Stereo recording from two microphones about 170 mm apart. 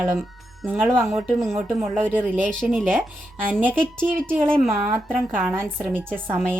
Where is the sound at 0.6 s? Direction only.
10° right (ahead or behind).